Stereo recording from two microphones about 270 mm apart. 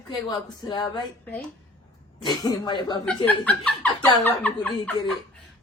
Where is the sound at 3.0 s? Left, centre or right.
Centre.